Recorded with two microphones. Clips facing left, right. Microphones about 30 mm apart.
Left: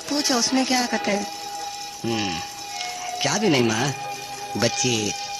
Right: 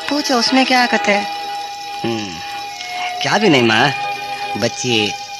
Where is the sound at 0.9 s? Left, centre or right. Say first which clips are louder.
Right 9 dB; right.